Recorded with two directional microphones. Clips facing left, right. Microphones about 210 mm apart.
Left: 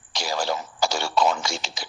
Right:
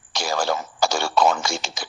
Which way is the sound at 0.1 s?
50° right (ahead or behind).